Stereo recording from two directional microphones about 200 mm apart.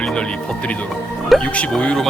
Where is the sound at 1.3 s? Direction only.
5° left (ahead or behind).